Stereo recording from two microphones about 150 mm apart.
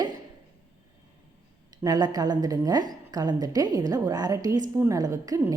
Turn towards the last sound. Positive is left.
turn(degrees=-25)  # may be behind; listen again after turning